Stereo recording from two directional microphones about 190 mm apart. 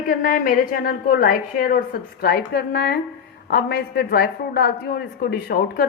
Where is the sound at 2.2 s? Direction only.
60° left (ahead or behind).